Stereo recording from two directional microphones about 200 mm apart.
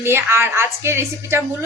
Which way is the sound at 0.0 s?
10° right (ahead or behind).